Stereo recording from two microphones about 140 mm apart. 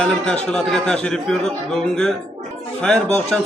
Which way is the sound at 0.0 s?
5° left (ahead or behind).